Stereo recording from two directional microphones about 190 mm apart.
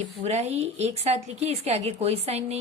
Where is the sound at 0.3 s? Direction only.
35° right (ahead or behind).